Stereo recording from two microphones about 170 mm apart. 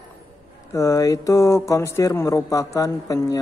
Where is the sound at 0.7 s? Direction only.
20° left (ahead or behind).